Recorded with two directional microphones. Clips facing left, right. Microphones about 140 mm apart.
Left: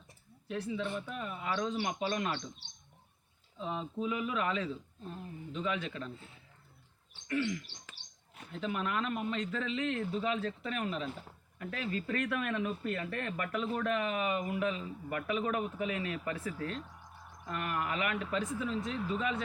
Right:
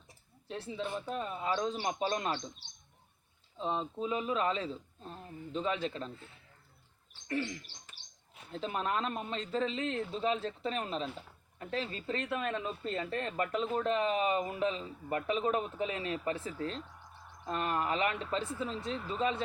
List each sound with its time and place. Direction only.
0.4 s a man's voice: 30° right (ahead or behind)
3.6 s a man's voice: 30° right (ahead or behind)
7.3 s a man's voice: 35° right (ahead or behind)